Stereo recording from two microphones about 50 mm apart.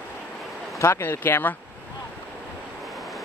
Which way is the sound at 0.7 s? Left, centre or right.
Left.